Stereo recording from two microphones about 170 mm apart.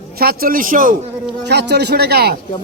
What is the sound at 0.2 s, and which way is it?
Speech, 60° right (ahead or behind).